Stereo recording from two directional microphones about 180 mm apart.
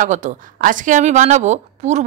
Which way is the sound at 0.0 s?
45° right (ahead or behind).